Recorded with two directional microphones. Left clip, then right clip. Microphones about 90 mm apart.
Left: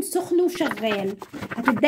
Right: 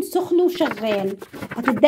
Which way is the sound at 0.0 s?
20° right (ahead or behind).